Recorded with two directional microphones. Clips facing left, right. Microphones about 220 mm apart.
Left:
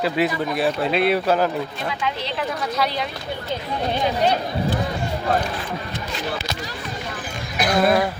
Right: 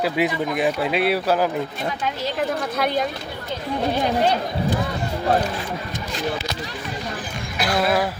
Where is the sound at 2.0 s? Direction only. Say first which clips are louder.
Right 2 dB; 45° right (ahead or behind).